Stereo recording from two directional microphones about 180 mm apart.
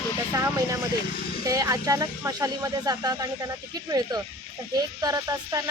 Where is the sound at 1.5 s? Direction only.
20° right (ahead or behind).